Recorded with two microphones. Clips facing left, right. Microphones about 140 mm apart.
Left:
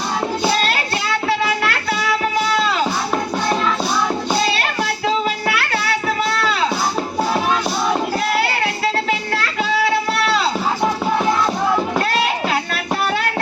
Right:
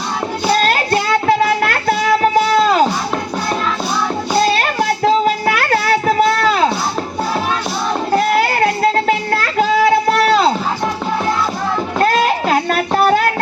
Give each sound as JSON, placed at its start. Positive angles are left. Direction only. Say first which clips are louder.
{"t": 0.6, "sound": "music", "louder": "right 6 dB", "side_deg": -45}
{"t": 4.4, "sound": "music", "louder": "right 5 dB", "side_deg": -45}
{"t": 8.1, "sound": "music", "louder": "right 5 dB", "side_deg": -45}
{"t": 12.0, "sound": "a sound", "louder": "right 5 dB", "side_deg": -45}